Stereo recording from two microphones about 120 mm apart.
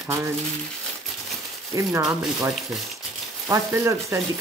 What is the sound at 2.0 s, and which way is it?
Speech, 5° right (ahead or behind).